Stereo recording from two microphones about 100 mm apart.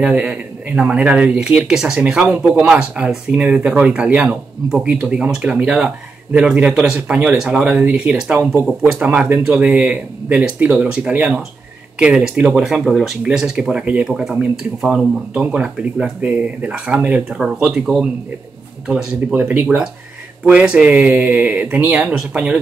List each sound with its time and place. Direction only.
0.0 s speech: 10° right (ahead or behind)
2.6 s speech: 5° right (ahead or behind)